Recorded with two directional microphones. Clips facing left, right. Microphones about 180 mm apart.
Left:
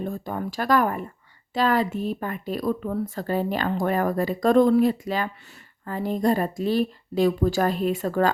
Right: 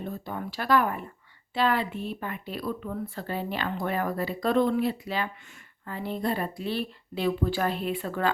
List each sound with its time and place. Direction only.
0.0 s speech: 45° left (ahead or behind)